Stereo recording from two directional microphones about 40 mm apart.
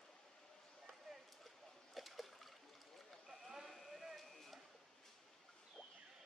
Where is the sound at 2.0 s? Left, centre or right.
Centre.